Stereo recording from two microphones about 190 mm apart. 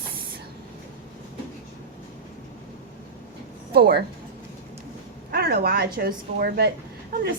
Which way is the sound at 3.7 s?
55° right (ahead or behind).